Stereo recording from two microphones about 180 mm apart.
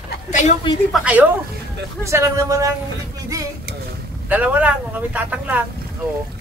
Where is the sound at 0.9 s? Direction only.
5° right (ahead or behind).